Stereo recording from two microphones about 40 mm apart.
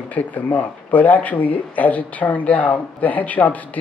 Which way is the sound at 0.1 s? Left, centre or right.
Left.